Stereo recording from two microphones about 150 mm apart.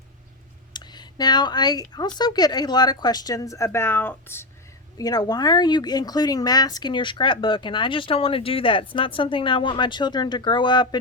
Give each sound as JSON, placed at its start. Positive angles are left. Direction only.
{"t": 0.7, "sound": "speech", "side_deg": 30}
{"t": 4.9, "sound": "speech", "side_deg": 25}